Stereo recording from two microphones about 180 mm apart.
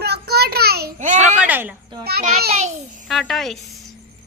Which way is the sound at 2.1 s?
60° right (ahead or behind).